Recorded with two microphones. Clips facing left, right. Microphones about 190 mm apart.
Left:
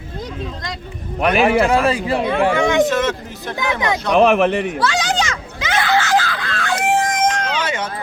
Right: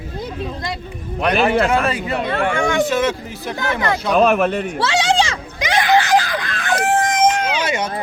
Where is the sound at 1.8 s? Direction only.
30° left (ahead or behind).